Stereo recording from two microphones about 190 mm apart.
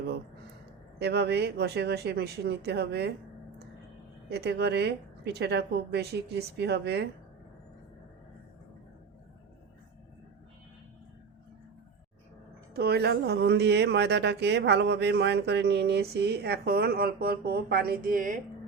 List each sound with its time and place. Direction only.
0.9 s speech: 60° right (ahead or behind)
4.3 s speech: 60° right (ahead or behind)
12.7 s speech: 60° right (ahead or behind)